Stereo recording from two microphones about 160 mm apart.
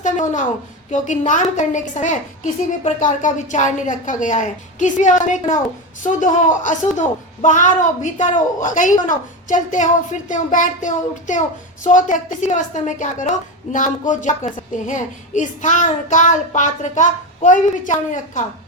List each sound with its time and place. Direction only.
0.0 s a woman's voice: 50° left (ahead or behind)